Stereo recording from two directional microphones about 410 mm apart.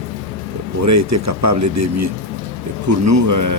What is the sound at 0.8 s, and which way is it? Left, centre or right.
Speech, right.